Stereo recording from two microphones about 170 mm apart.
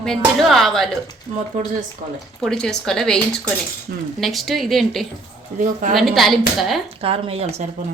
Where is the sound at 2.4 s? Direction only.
5° left (ahead or behind).